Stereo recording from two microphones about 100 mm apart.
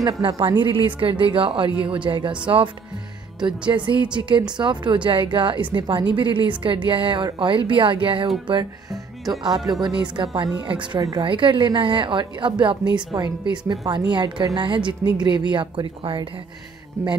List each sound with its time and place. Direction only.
0.3 s speech: 50° right (ahead or behind)
9.7 s speech: 40° right (ahead or behind)
11.0 s a woman's voice: 40° right (ahead or behind)
11.2 s speech: 55° right (ahead or behind)